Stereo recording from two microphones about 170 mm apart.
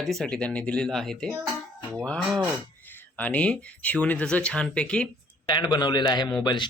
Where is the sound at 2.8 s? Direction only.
10° left (ahead or behind).